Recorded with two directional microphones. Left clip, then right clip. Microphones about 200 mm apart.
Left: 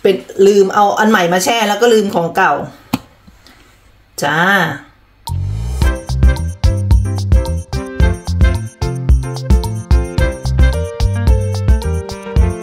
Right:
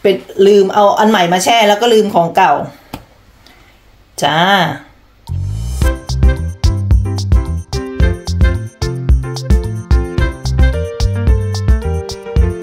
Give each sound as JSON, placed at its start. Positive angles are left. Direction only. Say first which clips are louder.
{"t": 0.0, "sound": "speech", "louder": "even", "side_deg": -15}
{"t": 4.2, "sound": "speech", "louder": "right 1 dB", "side_deg": -15}
{"t": 5.2, "sound": "music", "louder": "left 4 dB", "side_deg": 0}